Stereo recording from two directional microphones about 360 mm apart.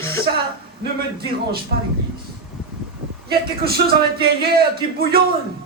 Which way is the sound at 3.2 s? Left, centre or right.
Right.